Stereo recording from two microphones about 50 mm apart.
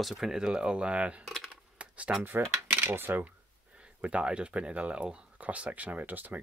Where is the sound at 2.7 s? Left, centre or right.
Right.